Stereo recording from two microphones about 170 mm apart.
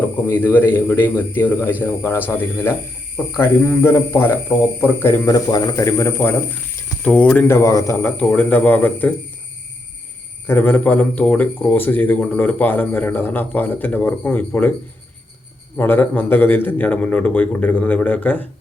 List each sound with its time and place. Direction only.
0.3 s speech: 10° left (ahead or behind)
10.4 s speech: 10° left (ahead or behind)
15.7 s speech: 10° left (ahead or behind)